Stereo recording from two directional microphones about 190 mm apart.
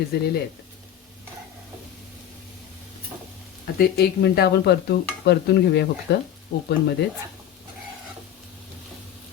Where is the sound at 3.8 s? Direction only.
60° left (ahead or behind).